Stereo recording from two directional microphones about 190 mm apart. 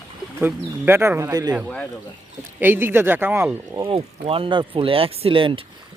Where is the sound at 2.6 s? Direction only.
10° right (ahead or behind).